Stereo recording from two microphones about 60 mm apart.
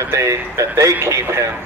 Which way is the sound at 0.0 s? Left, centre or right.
Right.